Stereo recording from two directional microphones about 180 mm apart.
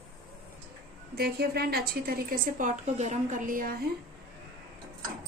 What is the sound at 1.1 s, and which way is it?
A woman's voice, 60° right (ahead or behind).